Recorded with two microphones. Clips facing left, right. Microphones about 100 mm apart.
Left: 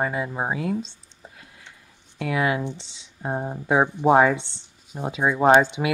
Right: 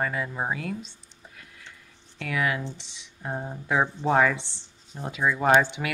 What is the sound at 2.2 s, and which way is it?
Speech, 25° left (ahead or behind).